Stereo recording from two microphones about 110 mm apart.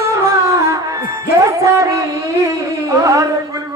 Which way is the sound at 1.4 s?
30° right (ahead or behind).